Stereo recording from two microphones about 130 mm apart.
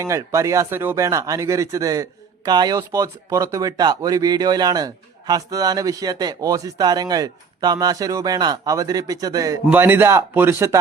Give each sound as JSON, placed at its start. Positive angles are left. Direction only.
{"t": 0.0, "sound": "speech", "side_deg": -20}
{"t": 9.6, "sound": "speech", "side_deg": -15}